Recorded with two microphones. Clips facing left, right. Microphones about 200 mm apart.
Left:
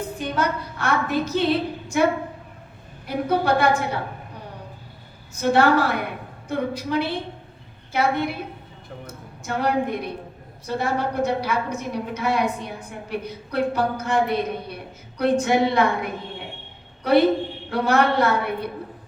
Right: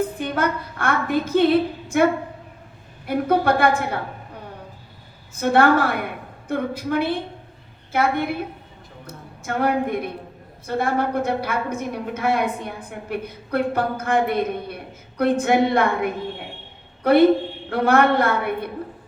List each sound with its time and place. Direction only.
0.2 s a sound: 55° right (ahead or behind)
3.1 s a woman's voice: 55° right (ahead or behind)
5.3 s a woman's voice: 55° right (ahead or behind)
17.0 s a man's voice: 55° right (ahead or behind)